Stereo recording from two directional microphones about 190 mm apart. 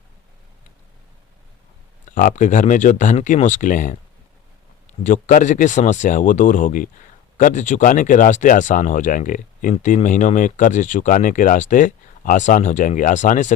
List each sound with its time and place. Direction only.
2.0 s speech: 45° left (ahead or behind)
5.0 s speech: 45° left (ahead or behind)